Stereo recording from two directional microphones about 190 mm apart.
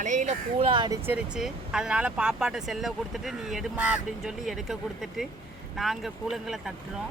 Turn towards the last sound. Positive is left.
turn(degrees=0)  # may be behind; listen again after turning